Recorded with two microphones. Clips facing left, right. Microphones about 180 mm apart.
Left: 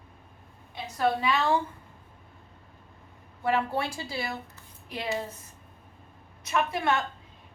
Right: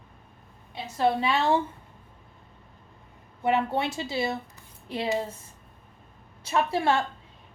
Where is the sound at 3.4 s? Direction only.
20° right (ahead or behind).